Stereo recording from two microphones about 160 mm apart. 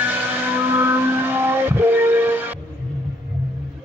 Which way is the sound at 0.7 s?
15° right (ahead or behind).